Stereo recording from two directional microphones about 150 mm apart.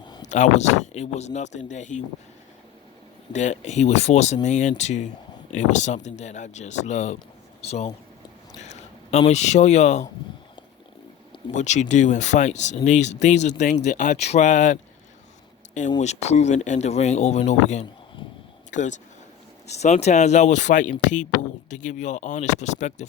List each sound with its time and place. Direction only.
0.3 s speech: 50° left (ahead or behind)
3.3 s speech: 50° left (ahead or behind)
11.5 s speech: 50° left (ahead or behind)
16.0 s speech: 50° left (ahead or behind)